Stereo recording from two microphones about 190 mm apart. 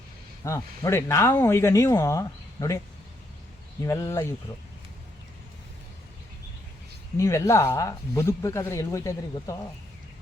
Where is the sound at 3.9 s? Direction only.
15° left (ahead or behind).